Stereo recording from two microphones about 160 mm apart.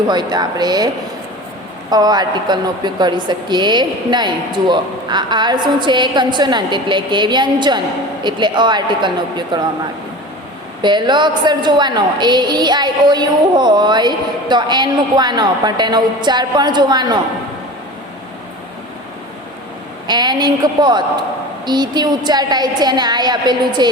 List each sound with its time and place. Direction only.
0.1 s a woman's voice: 25° right (ahead or behind)
1.9 s a woman's voice: 25° right (ahead or behind)
10.8 s a woman's voice: 30° right (ahead or behind)
20.1 s a woman's voice: 25° right (ahead or behind)